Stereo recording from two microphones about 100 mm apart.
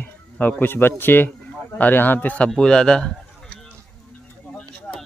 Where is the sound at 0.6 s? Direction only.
20° left (ahead or behind).